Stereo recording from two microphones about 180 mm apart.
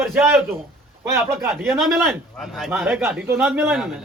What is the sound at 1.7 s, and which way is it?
A man's voice, centre (ahead or behind).